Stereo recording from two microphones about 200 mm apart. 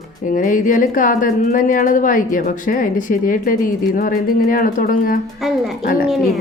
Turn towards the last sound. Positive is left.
turn(degrees=0)  # may be behind; listen again after turning